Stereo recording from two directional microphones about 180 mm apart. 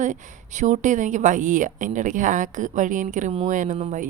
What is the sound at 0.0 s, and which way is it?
A woman's voice, 45° right (ahead or behind).